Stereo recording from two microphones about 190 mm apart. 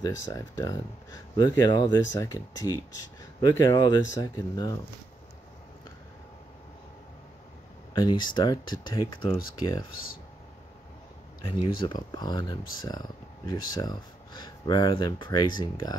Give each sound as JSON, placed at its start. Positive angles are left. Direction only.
{"t": 0.2, "sound": "speech", "side_deg": 15}
{"t": 7.9, "sound": "speech", "side_deg": 20}
{"t": 11.6, "sound": "speech", "side_deg": 25}